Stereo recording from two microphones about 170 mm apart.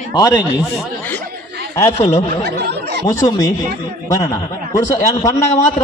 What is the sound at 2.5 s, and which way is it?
Speech, 75° right (ahead or behind).